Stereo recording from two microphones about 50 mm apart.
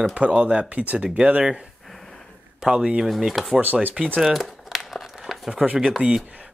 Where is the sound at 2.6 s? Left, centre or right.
Centre.